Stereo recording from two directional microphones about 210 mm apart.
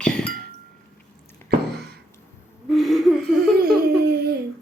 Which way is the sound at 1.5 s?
50° right (ahead or behind).